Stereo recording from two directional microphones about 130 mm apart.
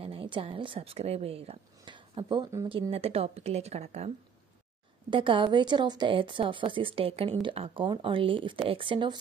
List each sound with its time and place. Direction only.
0.0 s a woman's voice: 45° right (ahead or behind)
2.7 s a woman's voice: 50° right (ahead or behind)
5.1 s a woman's voice: 40° right (ahead or behind)